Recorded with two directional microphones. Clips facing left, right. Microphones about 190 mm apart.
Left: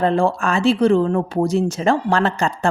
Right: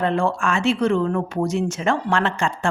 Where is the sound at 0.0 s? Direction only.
35° left (ahead or behind).